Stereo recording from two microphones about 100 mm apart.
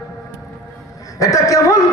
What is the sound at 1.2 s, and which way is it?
Speech, 35° left (ahead or behind).